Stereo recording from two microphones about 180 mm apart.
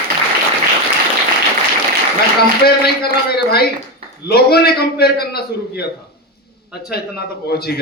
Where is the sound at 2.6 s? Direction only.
60° left (ahead or behind).